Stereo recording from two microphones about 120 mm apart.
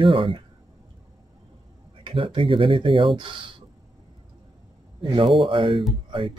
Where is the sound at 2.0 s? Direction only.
45° right (ahead or behind).